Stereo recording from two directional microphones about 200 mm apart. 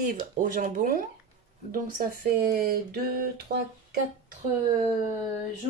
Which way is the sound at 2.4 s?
50° right (ahead or behind).